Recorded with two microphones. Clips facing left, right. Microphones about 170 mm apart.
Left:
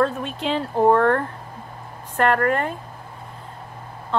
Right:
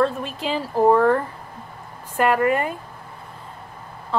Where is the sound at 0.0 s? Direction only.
Centre (ahead or behind).